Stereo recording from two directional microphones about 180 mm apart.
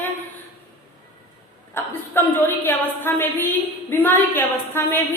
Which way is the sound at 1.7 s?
10° left (ahead or behind).